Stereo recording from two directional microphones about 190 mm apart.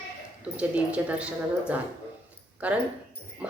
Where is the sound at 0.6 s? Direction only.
5° right (ahead or behind).